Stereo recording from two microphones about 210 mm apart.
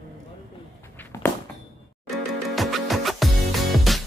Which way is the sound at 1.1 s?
15° left (ahead or behind).